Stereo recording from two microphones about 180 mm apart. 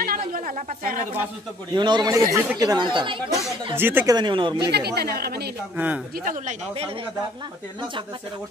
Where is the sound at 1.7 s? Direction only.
25° right (ahead or behind).